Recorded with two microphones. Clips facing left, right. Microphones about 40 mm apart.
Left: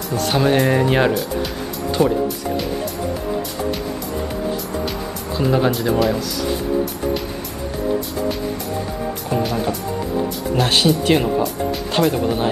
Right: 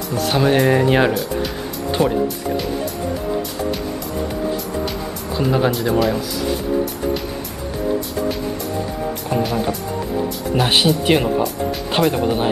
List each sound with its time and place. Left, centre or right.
0.3 s speech: centre
2.0 s speech: centre
5.3 s speech: centre
9.4 s speech: centre
10.5 s speech: centre